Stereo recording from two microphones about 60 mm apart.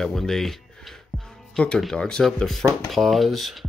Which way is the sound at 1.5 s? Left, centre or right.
Centre.